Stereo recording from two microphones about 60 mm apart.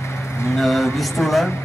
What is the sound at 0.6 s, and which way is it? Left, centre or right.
Speech, centre.